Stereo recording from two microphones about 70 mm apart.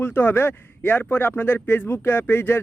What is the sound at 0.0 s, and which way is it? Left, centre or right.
Speech, left.